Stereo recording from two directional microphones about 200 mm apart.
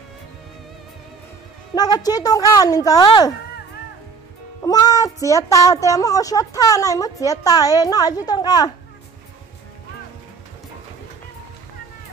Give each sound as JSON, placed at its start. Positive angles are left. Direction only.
{"t": 1.8, "sound": "speech", "side_deg": 20}
{"t": 4.6, "sound": "speech", "side_deg": 20}